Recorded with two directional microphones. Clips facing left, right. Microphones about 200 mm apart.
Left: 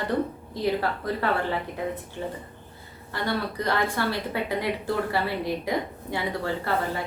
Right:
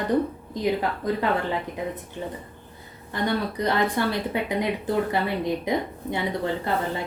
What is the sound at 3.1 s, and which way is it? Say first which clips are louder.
Speech: right 3 dB; 20° right (ahead or behind).